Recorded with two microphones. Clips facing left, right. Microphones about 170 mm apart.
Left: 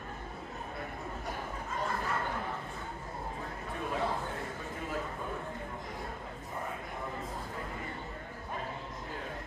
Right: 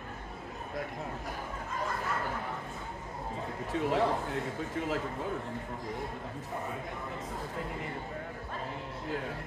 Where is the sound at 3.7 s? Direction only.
80° right.